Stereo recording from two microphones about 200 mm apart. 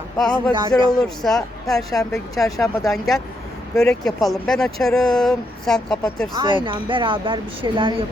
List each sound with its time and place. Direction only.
0.2 s speech: 5° left (ahead or behind)
6.3 s speech: 25° right (ahead or behind)